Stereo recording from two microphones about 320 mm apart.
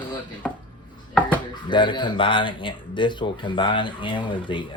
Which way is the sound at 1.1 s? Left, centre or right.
Centre.